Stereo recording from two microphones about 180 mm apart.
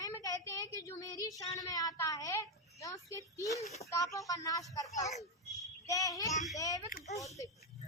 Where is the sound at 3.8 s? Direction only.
15° left (ahead or behind).